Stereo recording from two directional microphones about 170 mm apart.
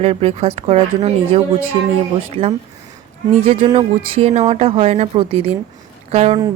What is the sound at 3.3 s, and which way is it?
Speech, 35° right (ahead or behind).